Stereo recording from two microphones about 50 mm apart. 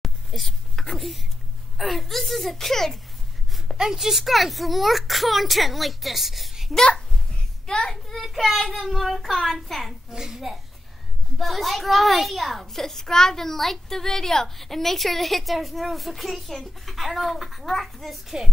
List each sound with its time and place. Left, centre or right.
0.0 s a sound: centre
1.8 s a child's voice: centre
3.7 s a child's voice: centre
7.6 s a child's voice: centre
7.9 s a child's voice: centre
10.1 s a child's voice: centre